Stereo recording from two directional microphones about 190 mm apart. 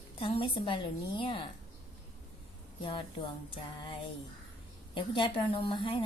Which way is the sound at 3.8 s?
25° left (ahead or behind).